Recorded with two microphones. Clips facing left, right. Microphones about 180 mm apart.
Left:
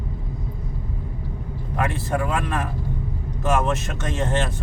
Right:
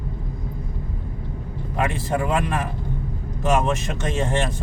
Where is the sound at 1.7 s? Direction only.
15° right (ahead or behind).